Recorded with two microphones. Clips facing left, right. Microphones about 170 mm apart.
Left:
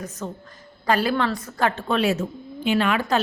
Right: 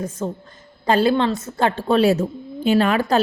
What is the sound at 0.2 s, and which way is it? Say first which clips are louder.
A woman's voice: right 6 dB; 35° right (ahead or behind).